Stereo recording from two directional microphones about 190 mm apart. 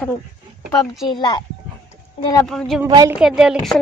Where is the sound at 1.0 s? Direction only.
25° left (ahead or behind).